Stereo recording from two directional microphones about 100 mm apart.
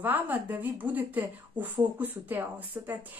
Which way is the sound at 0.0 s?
20° right (ahead or behind).